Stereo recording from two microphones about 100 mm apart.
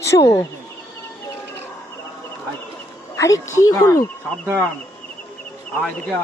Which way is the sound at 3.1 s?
30° left (ahead or behind).